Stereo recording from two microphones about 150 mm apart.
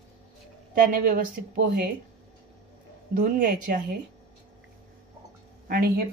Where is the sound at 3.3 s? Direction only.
65° right (ahead or behind).